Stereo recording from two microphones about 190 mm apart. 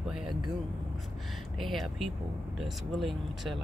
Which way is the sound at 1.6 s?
Centre (ahead or behind).